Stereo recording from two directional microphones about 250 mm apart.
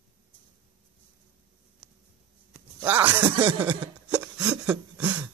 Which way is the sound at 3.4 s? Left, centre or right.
Right.